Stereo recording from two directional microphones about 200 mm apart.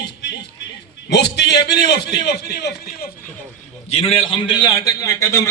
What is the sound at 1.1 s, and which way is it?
A man's voice, 55° left (ahead or behind).